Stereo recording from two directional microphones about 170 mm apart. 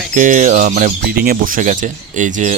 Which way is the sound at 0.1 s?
50° right (ahead or behind).